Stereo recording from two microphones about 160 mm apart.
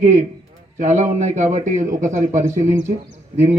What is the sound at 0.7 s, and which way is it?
Speech, 45° right (ahead or behind).